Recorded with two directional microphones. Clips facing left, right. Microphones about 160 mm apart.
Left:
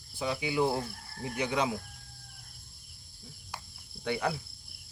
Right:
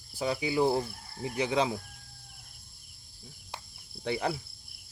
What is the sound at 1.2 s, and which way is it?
Speech, 30° right (ahead or behind).